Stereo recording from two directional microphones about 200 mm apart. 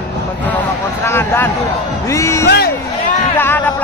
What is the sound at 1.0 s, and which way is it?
Speech, 10° left (ahead or behind).